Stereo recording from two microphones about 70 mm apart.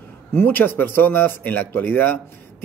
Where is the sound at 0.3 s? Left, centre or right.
Left.